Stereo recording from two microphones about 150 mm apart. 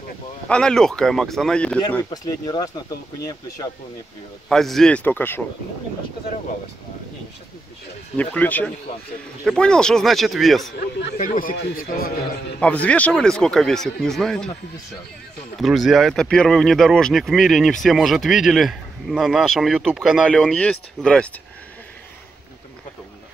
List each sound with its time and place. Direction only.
0.5 s speech: 5° left (ahead or behind)
2.0 s speech: 25° left (ahead or behind)
4.5 s speech: centre (ahead or behind)
8.2 s speech: 10° left (ahead or behind)
11.0 s a man's voice: 80° left
12.5 s speech: 10° left (ahead or behind)
15.6 s speech: centre (ahead or behind)